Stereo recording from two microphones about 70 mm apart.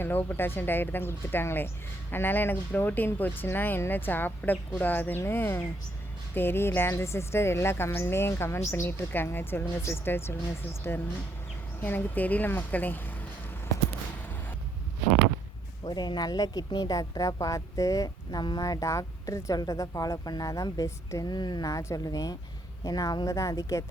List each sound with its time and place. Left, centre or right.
0.0 s a woman's voice: left
15.8 s speech: left
18.6 s speech: left
21.2 s speech: left
21.7 s speech: left